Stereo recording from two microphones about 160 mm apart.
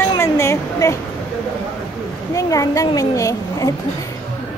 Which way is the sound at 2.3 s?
20° left (ahead or behind).